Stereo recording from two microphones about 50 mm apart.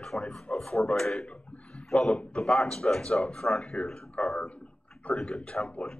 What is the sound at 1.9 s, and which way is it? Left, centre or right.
Speech, centre.